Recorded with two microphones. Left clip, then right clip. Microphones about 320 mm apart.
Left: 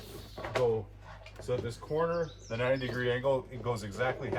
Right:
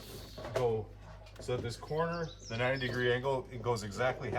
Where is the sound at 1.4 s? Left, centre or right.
Centre.